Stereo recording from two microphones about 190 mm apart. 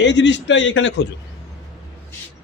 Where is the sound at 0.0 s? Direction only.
70° left (ahead or behind).